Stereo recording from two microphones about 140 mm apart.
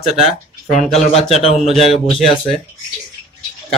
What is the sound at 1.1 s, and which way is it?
Speech, 45° left (ahead or behind).